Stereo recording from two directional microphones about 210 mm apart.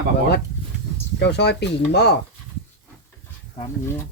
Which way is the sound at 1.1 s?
55° left (ahead or behind).